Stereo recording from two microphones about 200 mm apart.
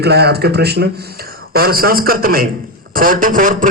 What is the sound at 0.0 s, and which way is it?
A man's voice, 55° right (ahead or behind).